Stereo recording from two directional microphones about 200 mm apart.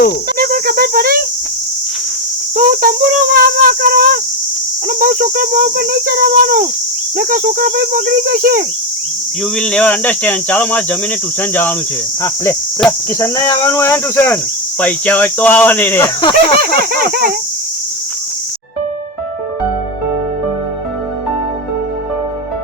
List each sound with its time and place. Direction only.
0.3 s speech: 45° right (ahead or behind)
2.6 s speech: 45° right (ahead or behind)
9.6 s speech: 5° left (ahead or behind)
13.1 s speech: 15° left (ahead or behind)
16.6 s speech: 50° right (ahead or behind)